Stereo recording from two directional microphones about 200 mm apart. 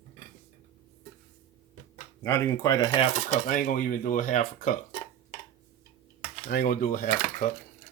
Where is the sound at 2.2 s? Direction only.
15° left (ahead or behind).